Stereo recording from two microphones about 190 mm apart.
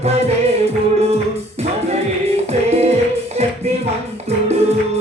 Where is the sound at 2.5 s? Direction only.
35° right (ahead or behind).